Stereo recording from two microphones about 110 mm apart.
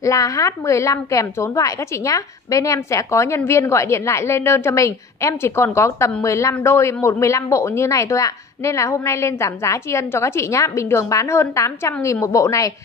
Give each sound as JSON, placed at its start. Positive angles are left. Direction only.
{"t": 0.0, "sound": "a woman's voice", "side_deg": 30}